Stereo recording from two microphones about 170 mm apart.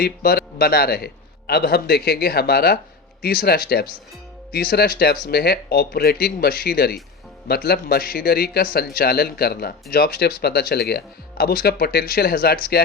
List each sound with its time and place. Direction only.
0.0 s a man's voice: 65° left (ahead or behind)